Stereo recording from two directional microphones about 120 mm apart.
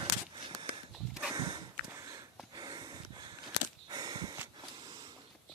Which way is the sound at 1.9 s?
30° right (ahead or behind).